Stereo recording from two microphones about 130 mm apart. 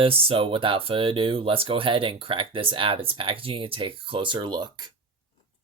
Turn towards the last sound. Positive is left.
turn(degrees=-35)  # may be behind; listen again after turning